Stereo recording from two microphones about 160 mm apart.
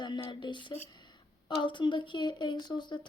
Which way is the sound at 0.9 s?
30° left (ahead or behind).